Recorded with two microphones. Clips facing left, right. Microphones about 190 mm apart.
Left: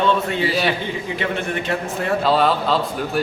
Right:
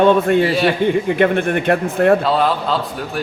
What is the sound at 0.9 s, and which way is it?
Speech, 55° right (ahead or behind).